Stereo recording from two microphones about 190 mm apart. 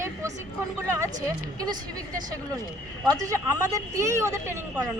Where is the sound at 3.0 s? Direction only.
20° right (ahead or behind).